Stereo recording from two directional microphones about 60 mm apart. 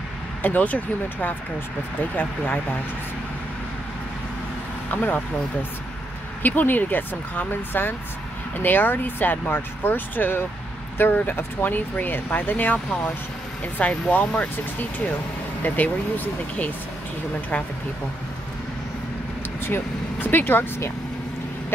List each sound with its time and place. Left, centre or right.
0.4 s speech: left
4.9 s speech: left
19.6 s speech: left